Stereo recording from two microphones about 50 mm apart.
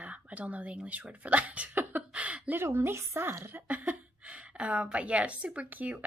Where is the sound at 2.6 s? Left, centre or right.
Right.